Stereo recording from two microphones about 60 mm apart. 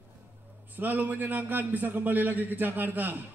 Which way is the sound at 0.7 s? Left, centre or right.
Right.